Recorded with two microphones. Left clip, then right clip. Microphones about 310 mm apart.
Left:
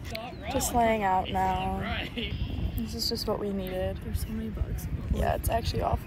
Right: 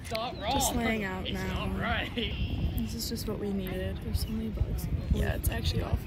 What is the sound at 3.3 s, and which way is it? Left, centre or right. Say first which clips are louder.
Speech: left 6 dB; centre.